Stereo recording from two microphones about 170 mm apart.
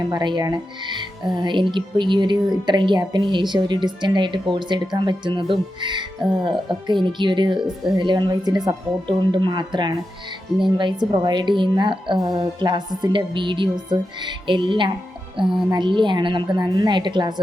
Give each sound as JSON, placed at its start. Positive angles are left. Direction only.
{"t": 0.0, "sound": "a woman's voice", "side_deg": -25}